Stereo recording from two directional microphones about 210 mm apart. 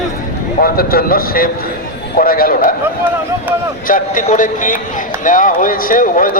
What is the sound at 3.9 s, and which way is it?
Speech, 40° left (ahead or behind).